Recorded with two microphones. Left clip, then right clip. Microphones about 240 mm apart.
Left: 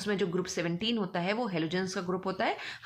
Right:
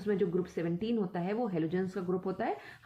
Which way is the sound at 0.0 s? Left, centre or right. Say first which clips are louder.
Even; left.